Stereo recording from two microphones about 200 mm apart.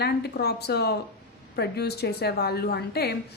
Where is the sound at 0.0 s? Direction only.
55° left (ahead or behind).